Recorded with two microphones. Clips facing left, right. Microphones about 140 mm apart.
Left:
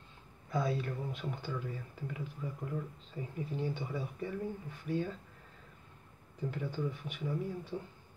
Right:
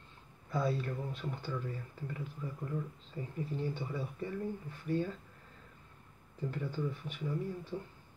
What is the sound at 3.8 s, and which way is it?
Speech, 10° left (ahead or behind).